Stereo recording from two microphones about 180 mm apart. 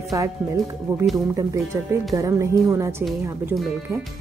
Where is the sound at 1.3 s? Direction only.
15° right (ahead or behind).